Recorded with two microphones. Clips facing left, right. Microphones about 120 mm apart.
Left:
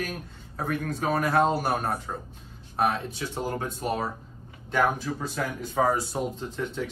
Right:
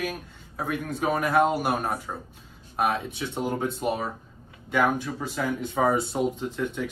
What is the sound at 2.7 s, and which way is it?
Speech, 10° right (ahead or behind).